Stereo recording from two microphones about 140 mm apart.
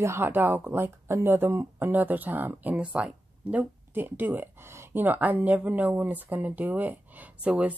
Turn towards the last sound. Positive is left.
turn(degrees=-10)  # may be behind; listen again after turning